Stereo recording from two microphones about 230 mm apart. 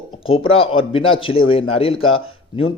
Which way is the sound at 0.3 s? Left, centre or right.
Left.